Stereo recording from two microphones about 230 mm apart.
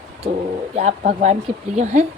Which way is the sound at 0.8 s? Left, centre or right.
Right.